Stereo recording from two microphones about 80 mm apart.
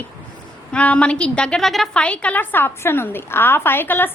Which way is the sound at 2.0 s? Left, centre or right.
Centre.